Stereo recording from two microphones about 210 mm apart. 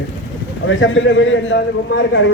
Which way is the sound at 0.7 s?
65° left (ahead or behind).